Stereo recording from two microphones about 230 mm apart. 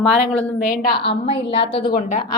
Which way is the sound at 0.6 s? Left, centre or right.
Left.